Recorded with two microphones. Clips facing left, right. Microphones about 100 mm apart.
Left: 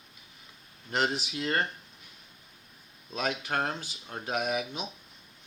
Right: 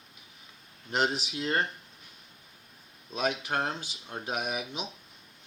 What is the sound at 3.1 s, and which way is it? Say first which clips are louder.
Speech: right 1 dB; 15° right (ahead or behind).